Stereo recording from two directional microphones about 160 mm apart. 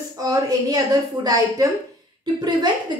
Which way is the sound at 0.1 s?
25° right (ahead or behind).